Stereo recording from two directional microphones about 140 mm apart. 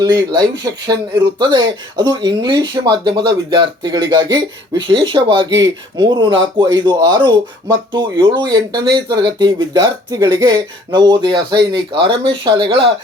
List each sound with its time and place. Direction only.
0.0 s speech: 30° right (ahead or behind)